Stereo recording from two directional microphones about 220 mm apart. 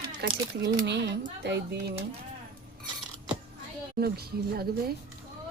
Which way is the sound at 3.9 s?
45° right (ahead or behind).